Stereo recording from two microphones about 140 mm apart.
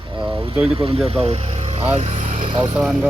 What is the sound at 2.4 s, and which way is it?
Speech, 35° right (ahead or behind).